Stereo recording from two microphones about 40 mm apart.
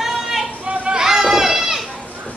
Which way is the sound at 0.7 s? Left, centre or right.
Centre.